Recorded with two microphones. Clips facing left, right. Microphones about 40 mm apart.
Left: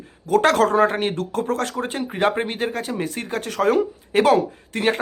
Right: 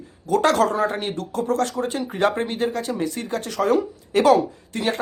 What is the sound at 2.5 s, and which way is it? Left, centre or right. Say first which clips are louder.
Speech: right 1 dB; left.